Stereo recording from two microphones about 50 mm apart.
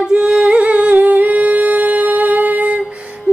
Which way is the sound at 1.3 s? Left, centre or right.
Right.